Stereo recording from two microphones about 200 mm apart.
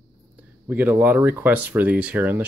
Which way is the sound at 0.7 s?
10° right (ahead or behind).